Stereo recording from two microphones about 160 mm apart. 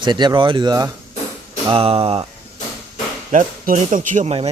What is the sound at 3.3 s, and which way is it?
Speech, 55° right (ahead or behind).